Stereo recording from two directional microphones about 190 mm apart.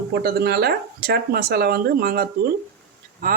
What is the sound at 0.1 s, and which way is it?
Speech, 55° right (ahead or behind).